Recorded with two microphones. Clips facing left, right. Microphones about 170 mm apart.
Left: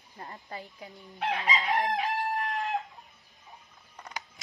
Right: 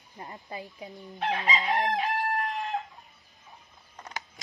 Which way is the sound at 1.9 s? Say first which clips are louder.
Right 1 dB; centre (ahead or behind).